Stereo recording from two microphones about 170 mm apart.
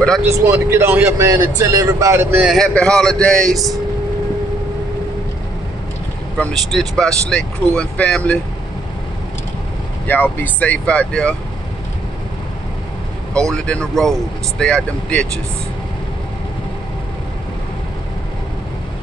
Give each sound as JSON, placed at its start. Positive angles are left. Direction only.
{"t": 0.2, "sound": "speech", "side_deg": -15}
{"t": 2.4, "sound": "speech", "side_deg": 0}
{"t": 6.3, "sound": "speech", "side_deg": 5}
{"t": 10.0, "sound": "speech", "side_deg": 10}
{"t": 13.5, "sound": "speech", "side_deg": 5}